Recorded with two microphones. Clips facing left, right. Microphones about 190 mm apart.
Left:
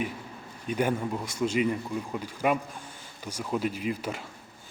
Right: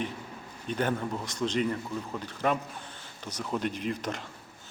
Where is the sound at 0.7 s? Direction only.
10° left (ahead or behind).